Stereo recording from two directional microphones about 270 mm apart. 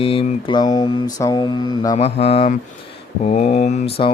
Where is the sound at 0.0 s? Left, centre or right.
Centre.